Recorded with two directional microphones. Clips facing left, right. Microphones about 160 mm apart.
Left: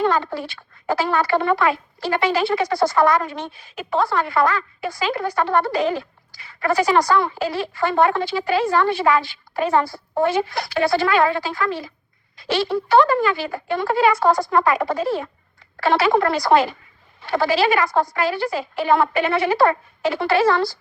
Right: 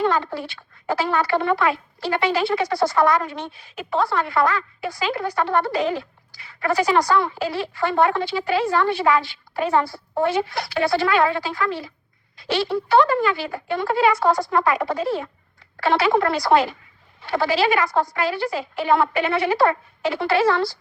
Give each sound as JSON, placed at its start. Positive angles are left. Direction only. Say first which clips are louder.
{"t": 0.0, "sound": "speech", "louder": "left 1 dB", "side_deg": 45}